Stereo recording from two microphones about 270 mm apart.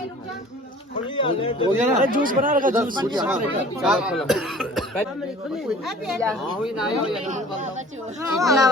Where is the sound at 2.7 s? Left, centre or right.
Centre.